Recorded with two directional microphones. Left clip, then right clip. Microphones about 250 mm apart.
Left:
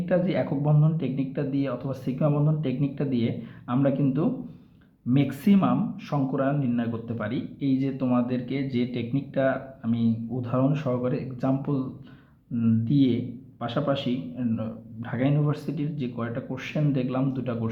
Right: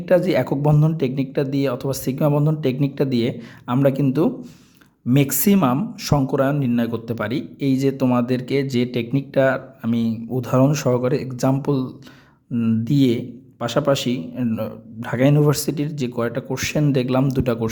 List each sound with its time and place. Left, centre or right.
0.0 s speech: right